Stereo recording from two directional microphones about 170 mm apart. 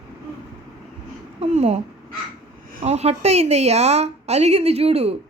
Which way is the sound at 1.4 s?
40° right (ahead or behind).